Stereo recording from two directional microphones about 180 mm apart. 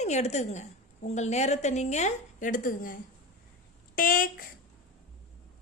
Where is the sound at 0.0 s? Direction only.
40° left (ahead or behind).